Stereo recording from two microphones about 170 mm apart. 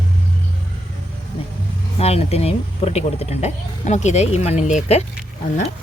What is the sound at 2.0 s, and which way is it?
Speech, 35° left (ahead or behind).